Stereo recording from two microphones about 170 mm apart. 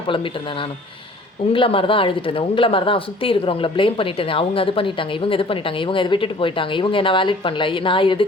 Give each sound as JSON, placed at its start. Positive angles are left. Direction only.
{"t": 0.1, "sound": "speech", "side_deg": 30}